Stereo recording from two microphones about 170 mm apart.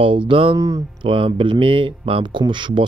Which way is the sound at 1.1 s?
30° right (ahead or behind).